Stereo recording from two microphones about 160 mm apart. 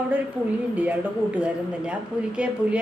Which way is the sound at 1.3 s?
5° right (ahead or behind).